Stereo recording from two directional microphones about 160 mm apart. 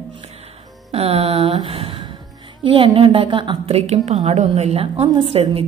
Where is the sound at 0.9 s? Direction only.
40° right (ahead or behind).